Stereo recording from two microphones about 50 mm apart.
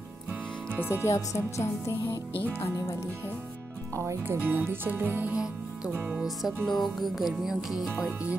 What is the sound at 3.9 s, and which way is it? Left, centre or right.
Speech, right.